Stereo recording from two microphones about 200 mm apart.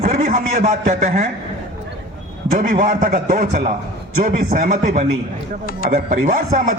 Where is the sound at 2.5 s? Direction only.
45° right (ahead or behind).